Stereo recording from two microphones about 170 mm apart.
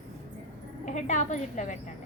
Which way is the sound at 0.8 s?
45° left (ahead or behind).